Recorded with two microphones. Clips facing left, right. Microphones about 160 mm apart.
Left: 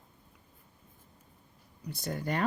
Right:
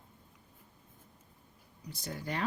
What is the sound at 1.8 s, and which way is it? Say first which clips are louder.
Speech: left 5 dB; 55° left (ahead or behind).